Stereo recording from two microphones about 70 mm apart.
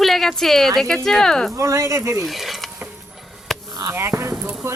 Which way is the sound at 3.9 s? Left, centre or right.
Right.